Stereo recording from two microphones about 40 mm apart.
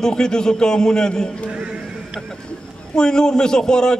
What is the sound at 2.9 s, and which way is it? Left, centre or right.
A man's voice, centre.